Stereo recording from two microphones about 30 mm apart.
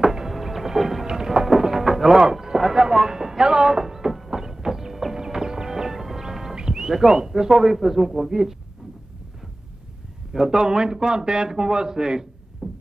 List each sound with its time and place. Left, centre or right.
0.0 s a sound: centre
1.0 s music: centre
6.5 s a sound: right
6.9 s speech: centre
10.3 s speech: centre
10.6 s a man's voice: right
12.6 s music: right